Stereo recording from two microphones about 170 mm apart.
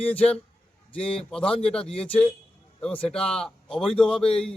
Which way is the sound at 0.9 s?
5° left (ahead or behind).